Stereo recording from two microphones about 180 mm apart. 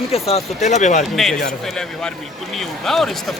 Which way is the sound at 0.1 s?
35° left (ahead or behind).